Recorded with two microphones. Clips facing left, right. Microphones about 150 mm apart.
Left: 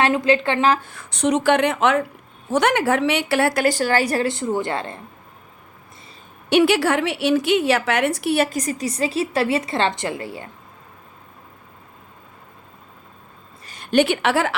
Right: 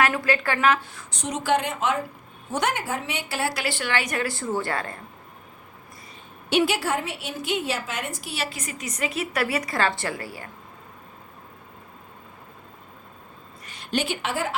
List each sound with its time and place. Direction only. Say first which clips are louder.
0.0 s a woman's voice: left 5 dB; 20° left (ahead or behind)
0.9 s a woman's voice: left 12 dB; 65° left (ahead or behind); by 4.3 s 35° left (ahead or behind)
4.3 s a woman's voice: left 5 dB; 20° left (ahead or behind)
6.5 s a woman's voice: left 6 dB; 70° left (ahead or behind); by 10.5 s 25° left (ahead or behind)
13.7 s a woman's voice: left 9 dB; 50° left (ahead or behind); by 14.5 s 75° left (ahead or behind)